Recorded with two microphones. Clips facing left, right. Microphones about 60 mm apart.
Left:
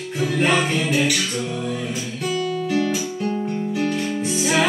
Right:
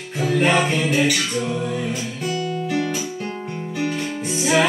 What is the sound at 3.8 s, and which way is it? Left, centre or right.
Music, centre.